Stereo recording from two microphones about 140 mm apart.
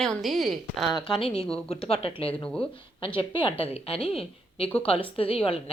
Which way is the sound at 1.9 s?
45° left (ahead or behind).